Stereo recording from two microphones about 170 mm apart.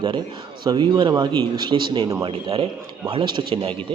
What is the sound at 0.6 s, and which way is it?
Speech, 25° right (ahead or behind).